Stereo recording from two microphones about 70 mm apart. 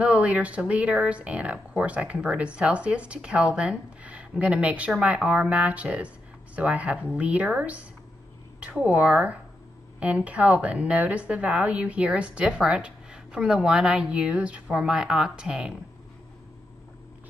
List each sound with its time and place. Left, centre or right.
0.0 s speech: right